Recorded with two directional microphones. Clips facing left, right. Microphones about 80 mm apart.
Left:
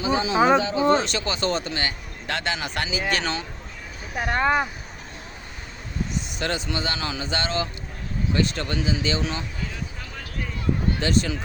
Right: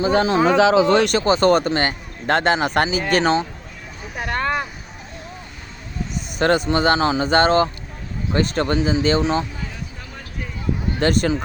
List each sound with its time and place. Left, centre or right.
0.1 s speech: right
0.5 s speech: right
1.2 s speech: right
1.5 s speech: right
4.1 s speech: centre
6.1 s speech: right
11.0 s speech: right